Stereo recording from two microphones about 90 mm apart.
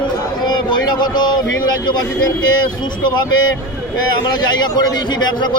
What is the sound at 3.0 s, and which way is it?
A man's voice, 55° left (ahead or behind).